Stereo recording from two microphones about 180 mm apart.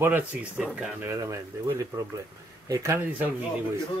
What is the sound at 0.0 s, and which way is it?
Speech, 10° right (ahead or behind).